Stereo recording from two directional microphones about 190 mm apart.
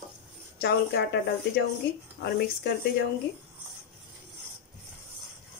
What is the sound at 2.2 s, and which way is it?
Speech, 60° left (ahead or behind).